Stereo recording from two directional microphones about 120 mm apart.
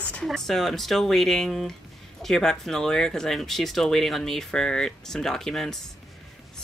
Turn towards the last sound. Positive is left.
turn(degrees=5)  # may be behind; listen again after turning